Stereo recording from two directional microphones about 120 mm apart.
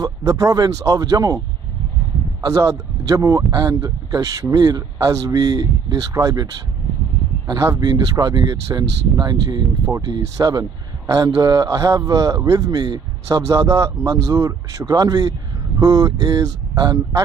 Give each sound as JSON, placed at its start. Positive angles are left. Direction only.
{"t": 0.0, "sound": "speech", "side_deg": -30}
{"t": 2.4, "sound": "speech", "side_deg": -25}